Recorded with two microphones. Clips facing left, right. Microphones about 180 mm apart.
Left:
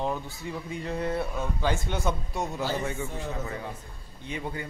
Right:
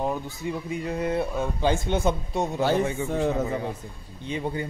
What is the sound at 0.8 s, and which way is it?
A man's voice, 15° right (ahead or behind).